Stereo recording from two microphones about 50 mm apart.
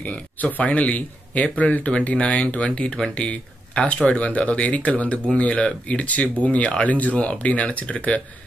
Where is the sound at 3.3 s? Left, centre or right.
Left.